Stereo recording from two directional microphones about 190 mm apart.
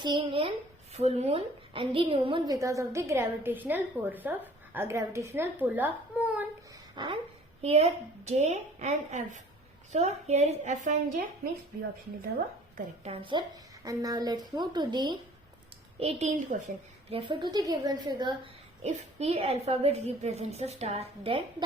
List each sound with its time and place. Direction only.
0.0 s a woman's voice: 25° right (ahead or behind); by 6.4 s 10° right (ahead or behind)
6.9 s a woman's voice: 25° right (ahead or behind); by 10.9 s 40° right (ahead or behind)
12.7 s a woman's voice: 30° right (ahead or behind)
16.0 s a woman's voice: 35° right (ahead or behind)
18.8 s a woman's voice: 35° right (ahead or behind)